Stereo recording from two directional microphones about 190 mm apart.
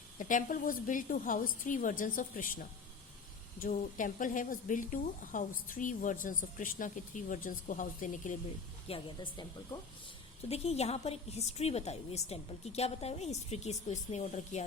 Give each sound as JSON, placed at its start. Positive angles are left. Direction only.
{"t": 0.2, "sound": "a woman's voice", "side_deg": 45}
{"t": 8.9, "sound": "speech", "side_deg": 25}
{"t": 10.5, "sound": "a woman's voice", "side_deg": 35}